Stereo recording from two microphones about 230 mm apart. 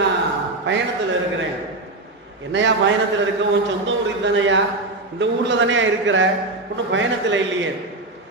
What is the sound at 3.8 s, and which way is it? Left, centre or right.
A man's voice, right.